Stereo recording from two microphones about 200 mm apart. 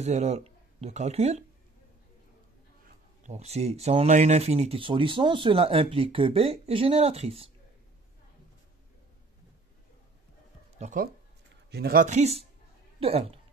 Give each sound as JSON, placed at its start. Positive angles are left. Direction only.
{"t": 0.0, "sound": "speech", "side_deg": -35}
{"t": 3.3, "sound": "speech", "side_deg": -30}
{"t": 10.8, "sound": "speech", "side_deg": -40}